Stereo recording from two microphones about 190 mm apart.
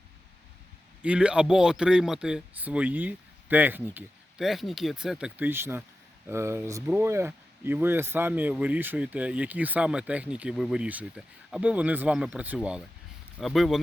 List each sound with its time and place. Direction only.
1.0 s speech: 5° right (ahead or behind)